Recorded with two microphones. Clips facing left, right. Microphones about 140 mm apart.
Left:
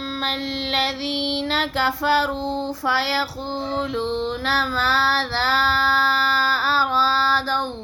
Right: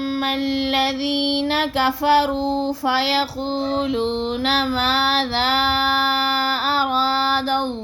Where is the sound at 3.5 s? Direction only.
20° right (ahead or behind).